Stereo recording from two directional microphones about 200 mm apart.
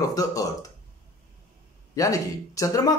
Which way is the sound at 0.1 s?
15° left (ahead or behind).